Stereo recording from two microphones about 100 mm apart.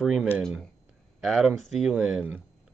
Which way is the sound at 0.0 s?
5° right (ahead or behind).